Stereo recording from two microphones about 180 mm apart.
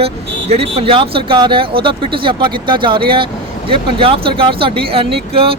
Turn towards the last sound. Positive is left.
turn(degrees=-30)  # may be behind; listen again after turning